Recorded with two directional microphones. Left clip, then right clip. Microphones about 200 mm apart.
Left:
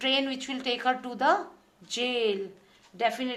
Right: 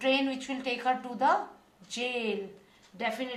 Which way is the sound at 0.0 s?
45° left (ahead or behind).